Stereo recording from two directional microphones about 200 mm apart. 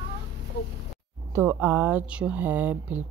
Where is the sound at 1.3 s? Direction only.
10° right (ahead or behind).